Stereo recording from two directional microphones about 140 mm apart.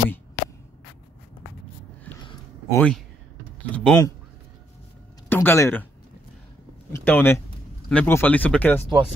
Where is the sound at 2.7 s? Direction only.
10° left (ahead or behind).